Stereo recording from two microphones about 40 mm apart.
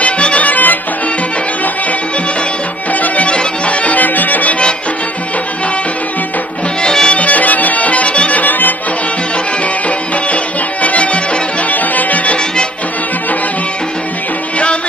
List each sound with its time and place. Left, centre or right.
0.0 s music: left
2.9 s music: left
6.8 s music: centre
7.2 s music: left
9.8 s music: left